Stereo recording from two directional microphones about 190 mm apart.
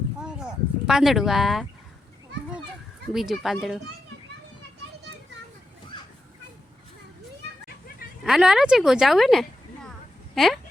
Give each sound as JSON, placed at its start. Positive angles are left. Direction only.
{"t": 0.2, "sound": "a sound", "side_deg": -5}
{"t": 0.9, "sound": "a woman's voice", "side_deg": 0}
{"t": 3.1, "sound": "a woman's voice", "side_deg": 0}
{"t": 8.2, "sound": "a woman's voice", "side_deg": 0}